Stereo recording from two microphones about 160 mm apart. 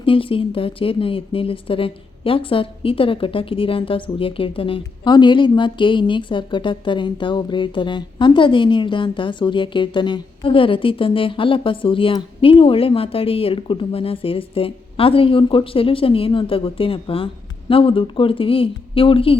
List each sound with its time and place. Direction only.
0.0 s speech: 35° left (ahead or behind)